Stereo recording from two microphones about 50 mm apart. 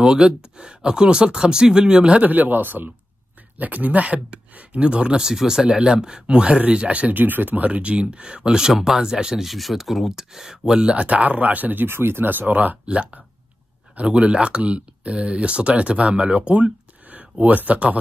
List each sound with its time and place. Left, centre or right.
0.0 s speech: centre
2.2 s speech: right
11.9 s speech: right
12.8 s speech: right